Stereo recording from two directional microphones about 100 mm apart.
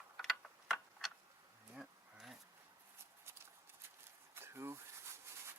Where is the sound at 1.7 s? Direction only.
5° right (ahead or behind).